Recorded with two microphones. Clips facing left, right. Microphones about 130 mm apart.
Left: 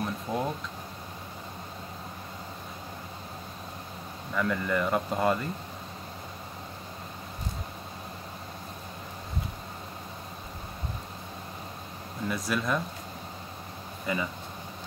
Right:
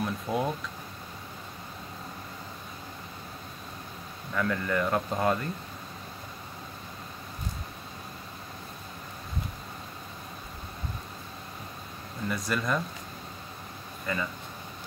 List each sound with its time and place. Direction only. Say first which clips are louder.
0.0 s speech: right 1 dB; 10° right (ahead or behind)
4.3 s speech: left 1 dB; 5° left (ahead or behind)
12.3 s speech: even; centre (ahead or behind)
14.1 s speech: left 1 dB; 15° left (ahead or behind)